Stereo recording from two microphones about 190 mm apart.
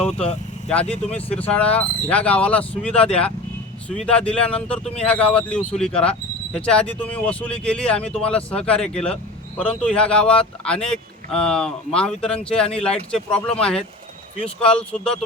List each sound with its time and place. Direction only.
0.9 s speech: 35° left (ahead or behind)
1.3 s speech: 5° left (ahead or behind)